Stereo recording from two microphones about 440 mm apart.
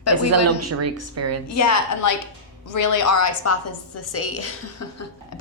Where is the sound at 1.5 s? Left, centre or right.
Left.